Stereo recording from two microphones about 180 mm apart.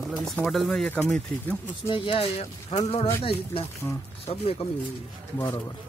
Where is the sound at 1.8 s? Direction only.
30° left (ahead or behind).